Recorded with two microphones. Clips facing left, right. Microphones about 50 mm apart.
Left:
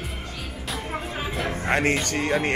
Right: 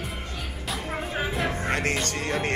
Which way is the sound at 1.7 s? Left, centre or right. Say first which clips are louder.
Left 4 dB; left.